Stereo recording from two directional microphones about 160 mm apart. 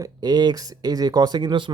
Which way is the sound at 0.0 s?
25° right (ahead or behind).